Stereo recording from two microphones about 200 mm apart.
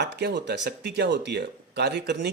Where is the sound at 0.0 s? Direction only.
60° right (ahead or behind).